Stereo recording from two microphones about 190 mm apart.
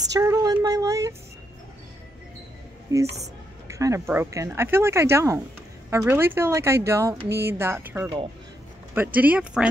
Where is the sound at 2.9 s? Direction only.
20° right (ahead or behind).